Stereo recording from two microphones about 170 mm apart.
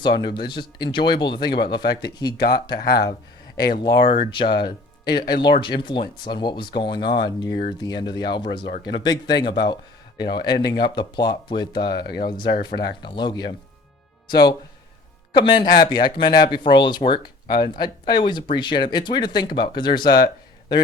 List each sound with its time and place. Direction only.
0.0 s speech: 25° left (ahead or behind)
2.4 s speech: 70° left (ahead or behind)
3.8 s speech: 30° left (ahead or behind)
11.9 s speech: 70° left (ahead or behind)
12.7 s speech: 25° left (ahead or behind)